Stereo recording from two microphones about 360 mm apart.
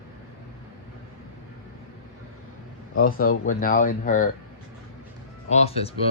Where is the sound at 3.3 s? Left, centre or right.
Left.